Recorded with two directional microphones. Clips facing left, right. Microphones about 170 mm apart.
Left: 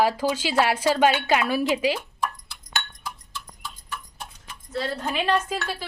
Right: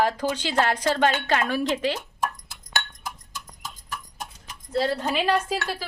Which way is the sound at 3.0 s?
45° right (ahead or behind).